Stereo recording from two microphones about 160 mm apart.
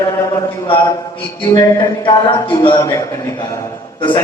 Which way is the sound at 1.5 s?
30° left (ahead or behind).